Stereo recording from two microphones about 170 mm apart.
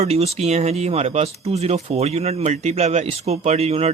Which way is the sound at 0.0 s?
40° right (ahead or behind).